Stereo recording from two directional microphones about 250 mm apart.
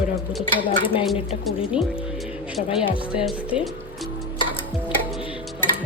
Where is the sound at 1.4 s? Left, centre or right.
Centre.